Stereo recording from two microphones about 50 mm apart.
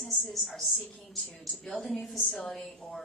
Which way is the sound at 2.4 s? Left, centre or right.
Centre.